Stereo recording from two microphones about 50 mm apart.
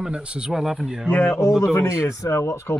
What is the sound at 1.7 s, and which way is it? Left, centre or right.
Speech, left.